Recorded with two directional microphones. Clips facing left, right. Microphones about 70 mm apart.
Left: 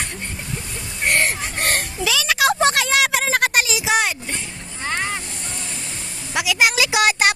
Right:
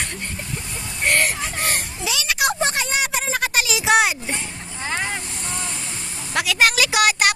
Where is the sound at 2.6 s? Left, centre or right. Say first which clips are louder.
Left 5 dB; left.